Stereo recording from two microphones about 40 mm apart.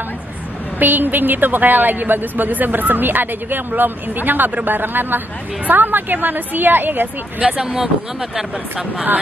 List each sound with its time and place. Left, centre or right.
0.7 s a woman's voice: right
7.4 s speech: right